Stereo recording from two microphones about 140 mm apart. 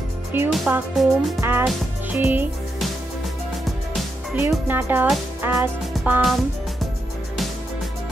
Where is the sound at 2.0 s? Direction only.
10° right (ahead or behind).